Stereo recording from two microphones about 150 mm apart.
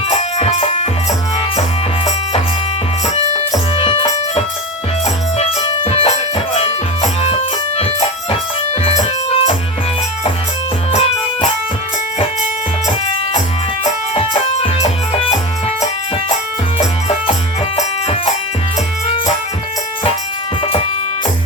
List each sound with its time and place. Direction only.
0.1 s music: 45° left (ahead or behind)
3.8 s music: 35° left (ahead or behind)
5.5 s music: 45° left (ahead or behind)
14.2 s music: 40° left (ahead or behind)
16.7 s music: 40° left (ahead or behind)